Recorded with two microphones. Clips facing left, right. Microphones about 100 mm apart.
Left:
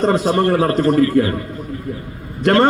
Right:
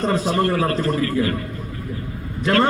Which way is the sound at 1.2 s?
60° left (ahead or behind).